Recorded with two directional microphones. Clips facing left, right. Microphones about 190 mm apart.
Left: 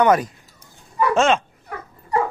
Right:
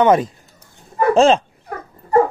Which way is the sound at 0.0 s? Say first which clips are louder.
Right 3 dB; 25° right (ahead or behind).